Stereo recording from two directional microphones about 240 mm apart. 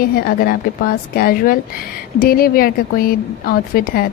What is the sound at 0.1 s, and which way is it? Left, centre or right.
Speech, left.